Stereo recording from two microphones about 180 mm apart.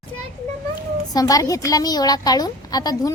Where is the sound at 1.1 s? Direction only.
20° left (ahead or behind).